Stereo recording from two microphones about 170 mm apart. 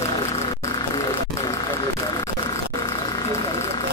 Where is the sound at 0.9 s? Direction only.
20° left (ahead or behind).